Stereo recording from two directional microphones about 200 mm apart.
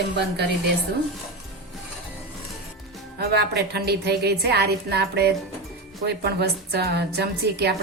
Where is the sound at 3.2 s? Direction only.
55° right (ahead or behind).